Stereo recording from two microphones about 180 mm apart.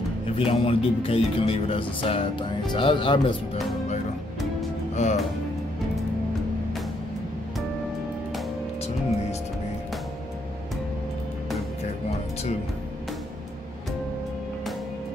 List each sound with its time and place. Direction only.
0.4 s speech: 30° left (ahead or behind)
5.0 s speech: 40° left (ahead or behind)